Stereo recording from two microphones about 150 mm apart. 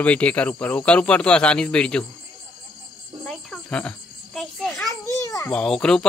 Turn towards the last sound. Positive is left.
turn(degrees=5)  # may be behind; listen again after turning